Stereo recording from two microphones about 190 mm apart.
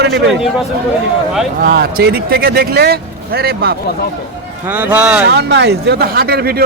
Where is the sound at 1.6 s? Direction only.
50° right (ahead or behind).